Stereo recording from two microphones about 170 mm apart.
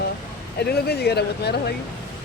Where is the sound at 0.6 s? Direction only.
70° left (ahead or behind).